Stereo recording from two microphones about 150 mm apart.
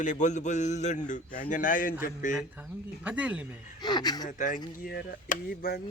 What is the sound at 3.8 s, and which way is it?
Speech, 25° left (ahead or behind).